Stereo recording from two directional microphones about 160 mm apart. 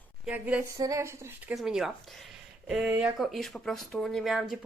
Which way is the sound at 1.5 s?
Centre (ahead or behind).